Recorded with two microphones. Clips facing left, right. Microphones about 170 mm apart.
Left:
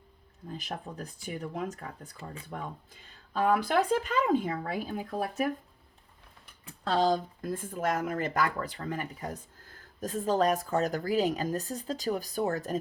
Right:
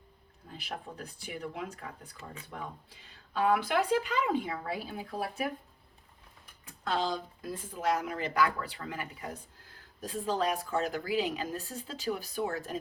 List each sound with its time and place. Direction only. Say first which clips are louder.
0.5 s speech: left 3 dB; 45° left (ahead or behind)
6.8 s speech: left 6 dB; 40° left (ahead or behind)